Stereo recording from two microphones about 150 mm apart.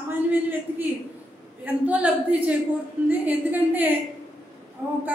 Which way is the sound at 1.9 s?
10° right (ahead or behind).